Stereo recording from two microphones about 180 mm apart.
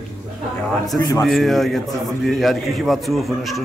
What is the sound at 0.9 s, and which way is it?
Speech, 20° left (ahead or behind).